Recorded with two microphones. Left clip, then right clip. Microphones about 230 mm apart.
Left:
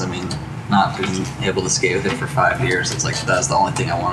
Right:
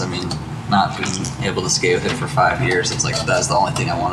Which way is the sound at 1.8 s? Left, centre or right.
Centre.